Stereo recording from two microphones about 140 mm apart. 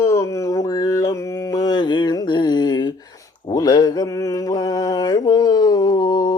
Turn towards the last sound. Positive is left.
turn(degrees=30)  # may be behind; listen again after turning